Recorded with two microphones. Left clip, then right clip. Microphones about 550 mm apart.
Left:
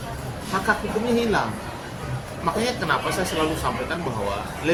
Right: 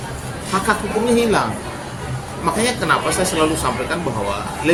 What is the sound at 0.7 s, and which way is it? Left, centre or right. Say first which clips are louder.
Speech: right 5 dB; left.